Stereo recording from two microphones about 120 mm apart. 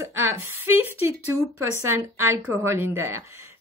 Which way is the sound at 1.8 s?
20° right (ahead or behind).